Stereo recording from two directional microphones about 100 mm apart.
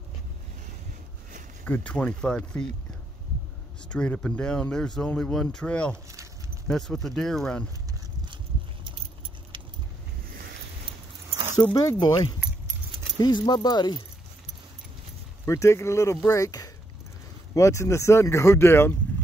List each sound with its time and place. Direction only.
1.7 s speech: 15° left (ahead or behind)
3.9 s speech: 10° left (ahead or behind)
8.8 s keys jangling: 60° right (ahead or behind)
12.0 s speech: 50° left (ahead or behind)
15.4 s speech: 30° left (ahead or behind)